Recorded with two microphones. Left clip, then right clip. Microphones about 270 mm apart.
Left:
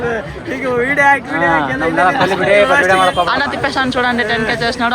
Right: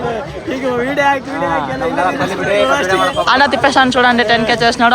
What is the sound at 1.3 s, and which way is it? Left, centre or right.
Speech, left.